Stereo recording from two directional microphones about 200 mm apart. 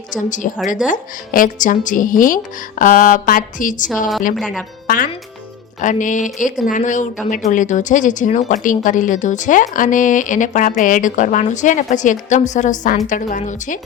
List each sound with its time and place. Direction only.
0.1 s speech: 40° left (ahead or behind)
4.4 s speech: centre (ahead or behind)
4.9 s speech: 45° left (ahead or behind)